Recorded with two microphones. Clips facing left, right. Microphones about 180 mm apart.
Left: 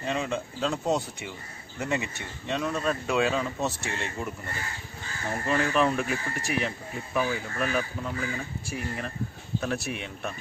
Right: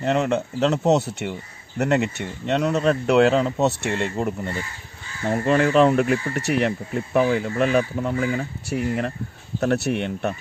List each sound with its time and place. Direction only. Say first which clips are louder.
0.0 s speech: right 8 dB; 70° right (ahead or behind)
5.5 s speech: right 8 dB; 65° right (ahead or behind)